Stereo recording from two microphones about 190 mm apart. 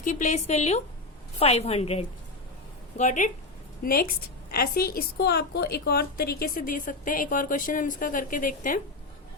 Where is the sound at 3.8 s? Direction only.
50° left (ahead or behind).